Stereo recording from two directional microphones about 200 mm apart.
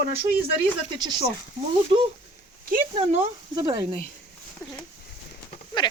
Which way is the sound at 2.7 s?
30° right (ahead or behind).